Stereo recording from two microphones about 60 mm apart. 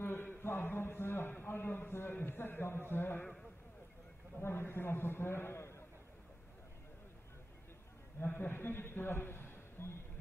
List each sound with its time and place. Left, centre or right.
0.0 s a man's voice: left
4.4 s a man's voice: left
8.2 s a man's voice: left